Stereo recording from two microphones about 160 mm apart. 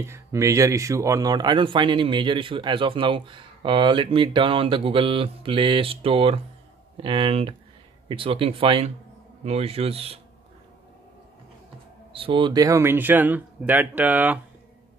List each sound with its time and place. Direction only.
0.0 s speech: 15° right (ahead or behind); by 10.2 s 40° right (ahead or behind)
12.1 s speech: 35° right (ahead or behind); by 14.4 s 10° right (ahead or behind)